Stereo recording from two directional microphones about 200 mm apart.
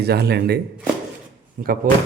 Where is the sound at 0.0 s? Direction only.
55° right (ahead or behind).